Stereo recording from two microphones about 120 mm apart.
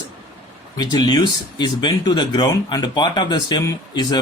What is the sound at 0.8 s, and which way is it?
Speech, 35° left (ahead or behind).